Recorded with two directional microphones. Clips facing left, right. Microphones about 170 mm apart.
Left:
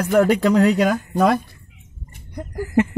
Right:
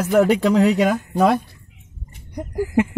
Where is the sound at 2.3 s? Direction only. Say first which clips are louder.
Even; 10° right (ahead or behind).